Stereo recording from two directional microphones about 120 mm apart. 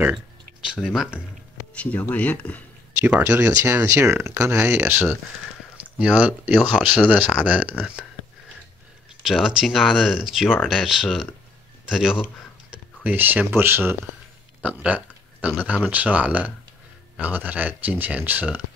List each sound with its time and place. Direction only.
0.7 s speech: 5° right (ahead or behind)
1.8 s speech: 15° left (ahead or behind)
3.1 s speech: 15° right (ahead or behind)
9.2 s speech: 5° right (ahead or behind)